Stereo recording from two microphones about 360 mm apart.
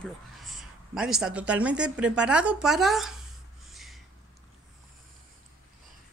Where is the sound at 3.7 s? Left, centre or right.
Centre.